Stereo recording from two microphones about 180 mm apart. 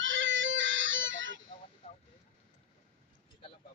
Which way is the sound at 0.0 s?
90° right.